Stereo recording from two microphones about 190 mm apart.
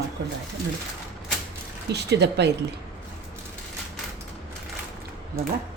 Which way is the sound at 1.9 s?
60° right (ahead or behind).